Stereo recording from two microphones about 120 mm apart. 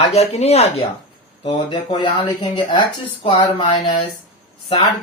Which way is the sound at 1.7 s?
45° left (ahead or behind).